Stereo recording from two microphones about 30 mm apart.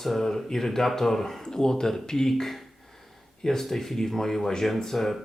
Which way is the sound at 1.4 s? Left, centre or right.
Left.